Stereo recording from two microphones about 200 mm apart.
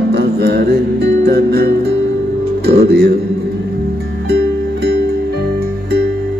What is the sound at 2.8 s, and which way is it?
Speech, 55° right (ahead or behind).